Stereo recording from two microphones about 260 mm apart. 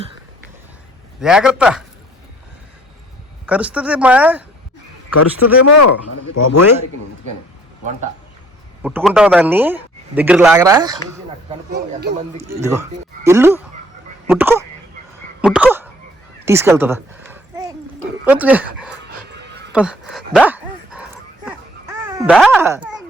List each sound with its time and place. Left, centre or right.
1.2 s speech: centre
3.4 s speech: centre
5.1 s speech: left
8.8 s speech: centre
11.7 s speech: right
12.6 s speech: centre
15.4 s a sound: centre
18.3 s speech: centre
19.7 s dog: centre
22.3 s speech: centre
22.6 s speech: centre